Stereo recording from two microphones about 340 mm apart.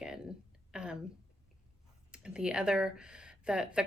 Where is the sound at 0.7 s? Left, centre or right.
Centre.